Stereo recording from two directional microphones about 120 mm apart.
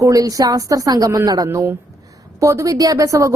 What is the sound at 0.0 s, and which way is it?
A woman's voice, 30° right (ahead or behind).